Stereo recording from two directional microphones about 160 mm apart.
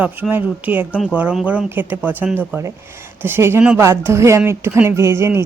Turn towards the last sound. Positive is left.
turn(degrees=-15)  # may be behind; listen again after turning